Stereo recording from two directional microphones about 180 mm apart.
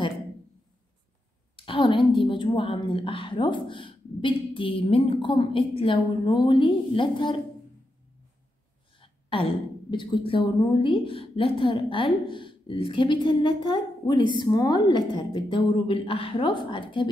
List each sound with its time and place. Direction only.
1.6 s a woman's voice: 30° left (ahead or behind)
8.9 s a woman's voice: 30° left (ahead or behind)